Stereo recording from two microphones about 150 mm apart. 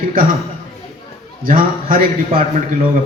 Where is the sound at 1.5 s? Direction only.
70° right (ahead or behind).